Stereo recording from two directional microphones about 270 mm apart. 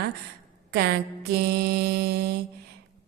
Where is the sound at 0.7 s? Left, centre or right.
Right.